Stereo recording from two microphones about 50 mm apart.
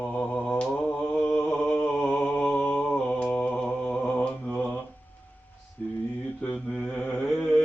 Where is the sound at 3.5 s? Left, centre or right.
Centre.